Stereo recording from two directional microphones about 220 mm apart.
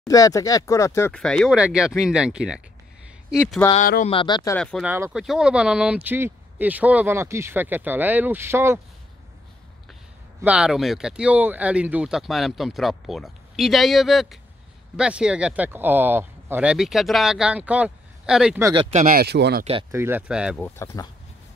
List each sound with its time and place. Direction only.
0.0 s speech: 15° left (ahead or behind); by 3.6 s centre (ahead or behind)
3.7 s speech: 35° left (ahead or behind)
4.1 s speech: 25° left (ahead or behind)
4.5 s speech: 5° left (ahead or behind)
4.8 s speech: 10° right (ahead or behind)
10.4 s speech: 5° right (ahead or behind)
18.6 s speech: 15° right (ahead or behind)
18.9 s speech: 35° right (ahead or behind)
19.6 s speech: 25° right (ahead or behind)
19.9 s speech: 10° right (ahead or behind)
20.6 s speech: 10° left (ahead or behind)